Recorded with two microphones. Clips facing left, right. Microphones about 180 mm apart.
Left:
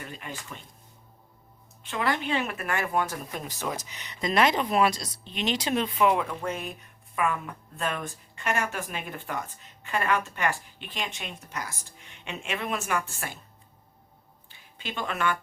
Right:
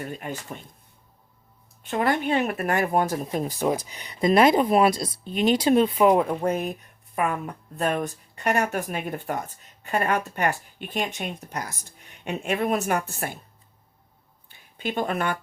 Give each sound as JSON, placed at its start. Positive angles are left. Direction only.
{"t": 0.0, "sound": "speech", "side_deg": -45}
{"t": 1.9, "sound": "a woman's voice", "side_deg": -45}
{"t": 4.3, "sound": "a woman's voice", "side_deg": -45}
{"t": 14.8, "sound": "speech", "side_deg": -45}